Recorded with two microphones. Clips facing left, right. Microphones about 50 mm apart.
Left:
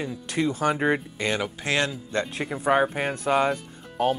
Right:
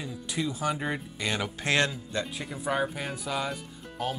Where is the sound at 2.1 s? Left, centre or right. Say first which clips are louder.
Left 6 dB; left.